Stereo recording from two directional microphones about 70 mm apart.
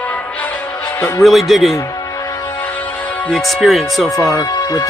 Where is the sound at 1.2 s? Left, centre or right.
Centre.